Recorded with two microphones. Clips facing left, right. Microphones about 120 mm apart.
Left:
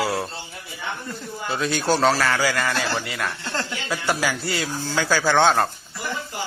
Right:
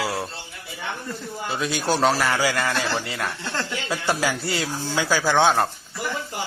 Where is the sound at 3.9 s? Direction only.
25° right (ahead or behind).